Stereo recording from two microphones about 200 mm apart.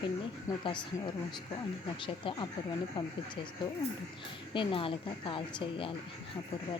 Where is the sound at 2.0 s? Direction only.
25° left (ahead or behind).